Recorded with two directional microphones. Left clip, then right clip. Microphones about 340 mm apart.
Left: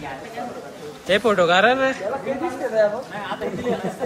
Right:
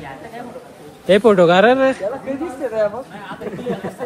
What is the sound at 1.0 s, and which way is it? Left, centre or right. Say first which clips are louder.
Speech: right 6 dB; centre.